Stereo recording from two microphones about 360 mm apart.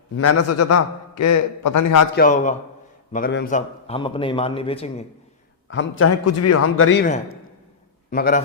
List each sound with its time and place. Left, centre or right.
0.2 s a man's voice: left
2.1 s a man's voice: left
5.6 s a man's voice: left
8.1 s a man's voice: left